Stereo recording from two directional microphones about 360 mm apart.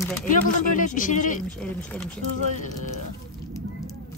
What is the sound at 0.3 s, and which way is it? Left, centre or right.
Speech, left.